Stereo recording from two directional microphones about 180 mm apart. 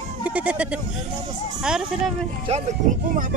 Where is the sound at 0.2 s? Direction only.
10° right (ahead or behind).